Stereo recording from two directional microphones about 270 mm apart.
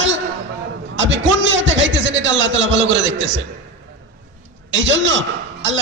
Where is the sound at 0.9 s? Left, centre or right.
Right.